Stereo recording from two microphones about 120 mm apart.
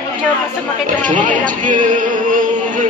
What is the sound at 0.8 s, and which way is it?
Chatter, 90° right.